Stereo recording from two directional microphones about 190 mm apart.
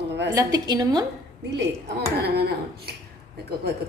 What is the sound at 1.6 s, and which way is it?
Speech, 60° right (ahead or behind).